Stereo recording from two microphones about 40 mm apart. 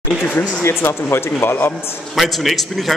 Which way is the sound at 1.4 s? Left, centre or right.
Left.